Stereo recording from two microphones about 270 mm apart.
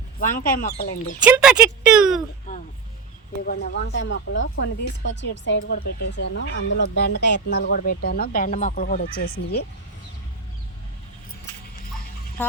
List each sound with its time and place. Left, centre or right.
0.2 s speech: left
1.2 s speech: centre
3.4 s speech: left
12.4 s speech: centre